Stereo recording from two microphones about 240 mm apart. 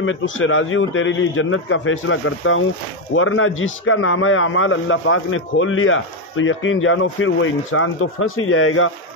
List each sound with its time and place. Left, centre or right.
0.0 s a man's voice: left